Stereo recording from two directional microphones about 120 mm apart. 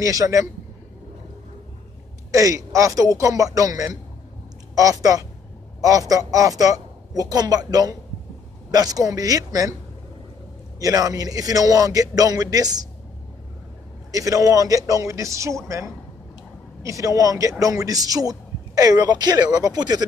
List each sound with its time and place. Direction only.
0.0 s a woman's voice: 30° right (ahead or behind)
2.3 s a woman's voice: 25° right (ahead or behind)
10.8 s a man's voice: 30° right (ahead or behind)
14.1 s a woman's voice: 30° right (ahead or behind)
16.8 s a woman's voice: 25° right (ahead or behind)